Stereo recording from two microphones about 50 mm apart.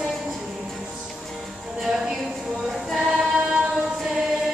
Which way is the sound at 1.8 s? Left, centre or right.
Centre.